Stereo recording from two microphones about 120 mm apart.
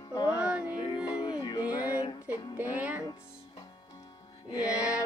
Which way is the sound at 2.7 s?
15° right (ahead or behind).